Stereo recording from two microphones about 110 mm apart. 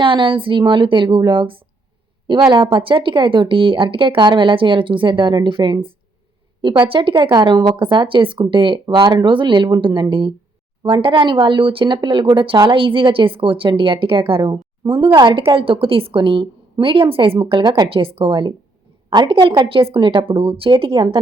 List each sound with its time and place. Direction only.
0.0 s speech: 50° right (ahead or behind)
15.5 s speech: 55° right (ahead or behind)